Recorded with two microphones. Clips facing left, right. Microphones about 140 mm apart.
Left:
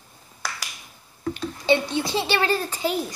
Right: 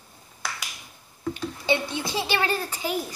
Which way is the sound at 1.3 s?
10° right (ahead or behind).